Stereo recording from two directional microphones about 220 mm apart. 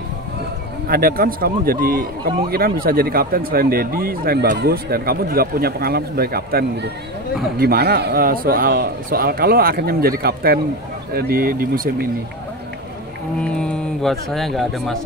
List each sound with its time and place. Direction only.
0.8 s a man's voice: 40° right (ahead or behind)
13.4 s speech: 5° left (ahead or behind)